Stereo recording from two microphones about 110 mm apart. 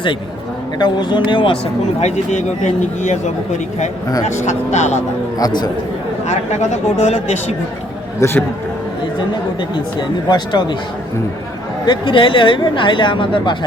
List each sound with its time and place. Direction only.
0.8 s speech: 45° left (ahead or behind)
2.0 s speech: 90° left
4.3 s speech: 90° left
5.4 s speech: 40° left (ahead or behind)
6.2 s speech: 90° left
8.2 s a man's voice: 20° left (ahead or behind)
9.6 s speech: 45° left (ahead or behind)
11.9 s speech: 50° left (ahead or behind)